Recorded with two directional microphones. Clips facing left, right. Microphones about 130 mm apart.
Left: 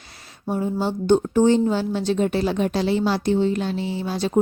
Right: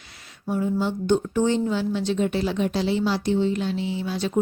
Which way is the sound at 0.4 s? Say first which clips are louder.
Left 1 dB; 35° left (ahead or behind).